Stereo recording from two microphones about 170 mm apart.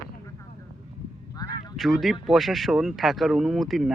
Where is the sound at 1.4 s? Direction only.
20° left (ahead or behind).